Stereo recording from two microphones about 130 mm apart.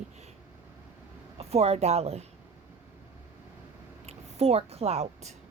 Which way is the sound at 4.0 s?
55° right (ahead or behind).